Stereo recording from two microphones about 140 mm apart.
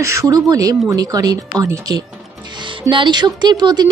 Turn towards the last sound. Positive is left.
turn(degrees=-30)  # may be behind; listen again after turning